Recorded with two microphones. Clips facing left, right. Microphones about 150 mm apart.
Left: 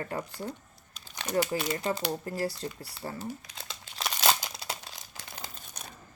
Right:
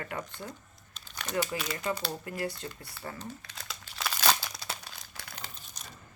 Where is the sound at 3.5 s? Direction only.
25° left (ahead or behind).